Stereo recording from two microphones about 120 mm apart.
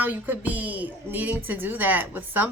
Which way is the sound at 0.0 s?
15° right (ahead or behind).